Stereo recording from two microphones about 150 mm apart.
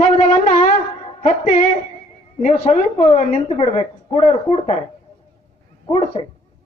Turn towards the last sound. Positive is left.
turn(degrees=40)  # may be behind; listen again after turning